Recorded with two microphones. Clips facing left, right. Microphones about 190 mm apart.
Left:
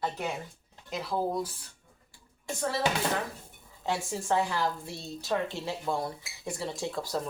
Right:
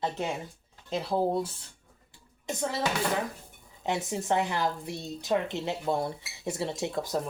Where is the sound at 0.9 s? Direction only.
30° right (ahead or behind).